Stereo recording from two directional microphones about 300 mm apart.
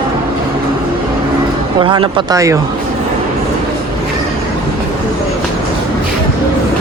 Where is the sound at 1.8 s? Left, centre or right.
Centre.